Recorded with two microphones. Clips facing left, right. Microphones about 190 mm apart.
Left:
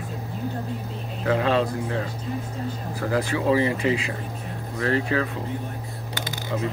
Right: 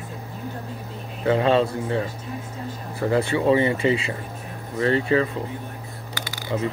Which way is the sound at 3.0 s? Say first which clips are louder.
Right 3 dB; 10° right (ahead or behind).